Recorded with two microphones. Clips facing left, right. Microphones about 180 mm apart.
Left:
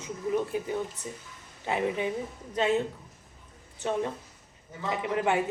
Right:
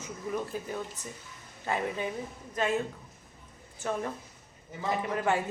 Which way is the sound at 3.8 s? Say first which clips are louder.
Left 3 dB; 20° left (ahead or behind).